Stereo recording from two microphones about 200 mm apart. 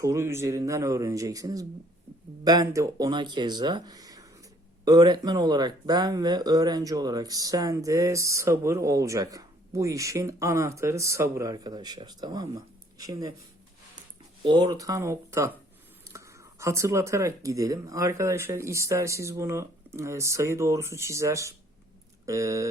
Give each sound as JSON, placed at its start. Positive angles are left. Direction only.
{"t": 0.0, "sound": "speech", "side_deg": -15}
{"t": 14.4, "sound": "speech", "side_deg": -20}